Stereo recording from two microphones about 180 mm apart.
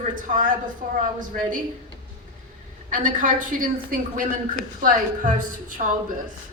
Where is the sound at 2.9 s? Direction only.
45° right (ahead or behind).